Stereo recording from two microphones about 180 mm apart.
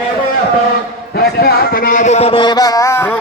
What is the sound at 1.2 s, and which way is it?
A man's voice, 65° left (ahead or behind).